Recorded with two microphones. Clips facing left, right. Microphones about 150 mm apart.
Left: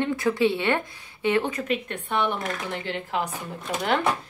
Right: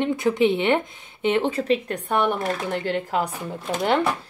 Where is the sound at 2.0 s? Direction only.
45° right (ahead or behind).